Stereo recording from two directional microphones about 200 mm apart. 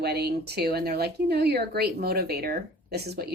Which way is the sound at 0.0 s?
50° right (ahead or behind).